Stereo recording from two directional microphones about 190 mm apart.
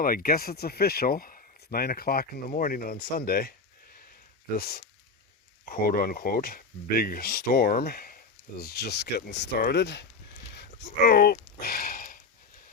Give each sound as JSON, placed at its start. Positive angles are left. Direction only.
{"t": 0.0, "sound": "speech", "side_deg": 50}
{"t": 4.5, "sound": "speech", "side_deg": 55}
{"t": 10.5, "sound": "a sound", "side_deg": 65}